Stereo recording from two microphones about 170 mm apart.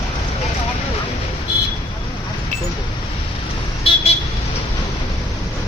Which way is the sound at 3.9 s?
35° left (ahead or behind).